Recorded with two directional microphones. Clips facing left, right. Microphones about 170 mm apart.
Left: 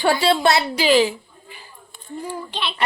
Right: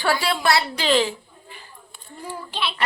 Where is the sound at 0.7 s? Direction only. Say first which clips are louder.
Left 4 dB; 10° left (ahead or behind).